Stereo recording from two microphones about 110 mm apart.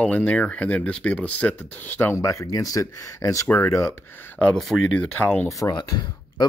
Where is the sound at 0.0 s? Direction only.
15° left (ahead or behind).